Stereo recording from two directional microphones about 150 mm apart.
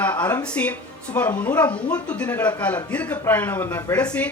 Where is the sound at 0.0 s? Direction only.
10° left (ahead or behind).